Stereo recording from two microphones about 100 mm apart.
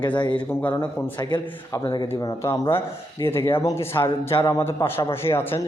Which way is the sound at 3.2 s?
25° left (ahead or behind).